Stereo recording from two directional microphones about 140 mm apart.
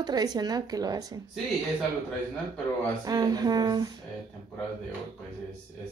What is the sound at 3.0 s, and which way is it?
Speech, 25° right (ahead or behind).